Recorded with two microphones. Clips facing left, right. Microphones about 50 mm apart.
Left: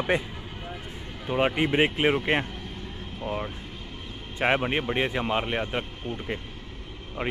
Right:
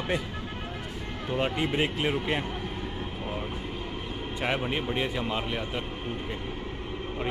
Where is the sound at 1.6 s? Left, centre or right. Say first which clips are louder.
Left 4 dB; left.